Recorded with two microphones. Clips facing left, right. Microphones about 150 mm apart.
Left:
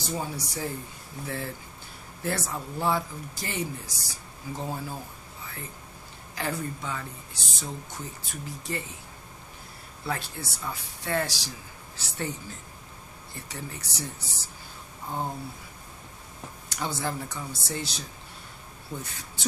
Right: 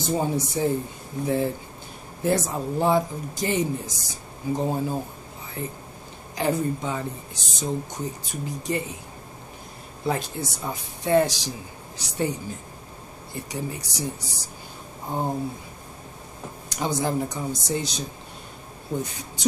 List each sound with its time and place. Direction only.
0.0 s speech: 20° right (ahead or behind)
6.3 s speech: 20° right (ahead or behind)
10.0 s speech: 20° right (ahead or behind)
16.6 s speech: 15° right (ahead or behind)
18.9 s speech: 30° right (ahead or behind)